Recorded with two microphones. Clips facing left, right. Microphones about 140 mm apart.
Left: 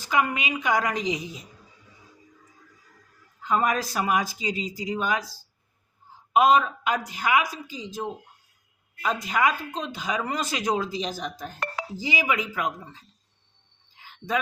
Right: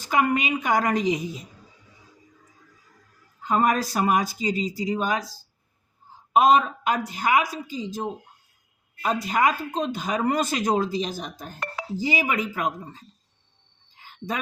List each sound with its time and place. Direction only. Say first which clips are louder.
0.0 s a woman's voice: right 3 dB; 45° right (ahead or behind)
3.4 s speech: right 2 dB; 45° right (ahead or behind)
6.3 s a woman's voice: right 1 dB; 40° right (ahead or behind)
14.0 s a sound: right 1 dB; 45° right (ahead or behind)